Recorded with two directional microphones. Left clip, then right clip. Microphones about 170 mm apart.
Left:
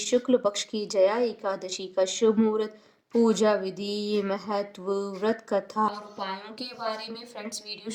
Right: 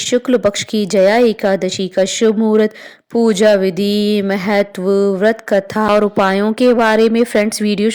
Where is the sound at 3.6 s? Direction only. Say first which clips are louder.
Right 16 dB; 30° right (ahead or behind).